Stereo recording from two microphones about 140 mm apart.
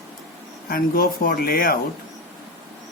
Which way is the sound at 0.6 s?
90° left.